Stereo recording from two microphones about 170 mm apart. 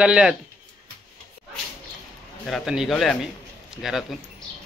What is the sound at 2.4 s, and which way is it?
Speech, centre (ahead or behind).